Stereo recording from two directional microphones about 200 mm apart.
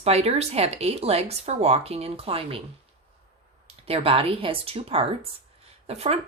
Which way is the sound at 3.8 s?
30° right (ahead or behind).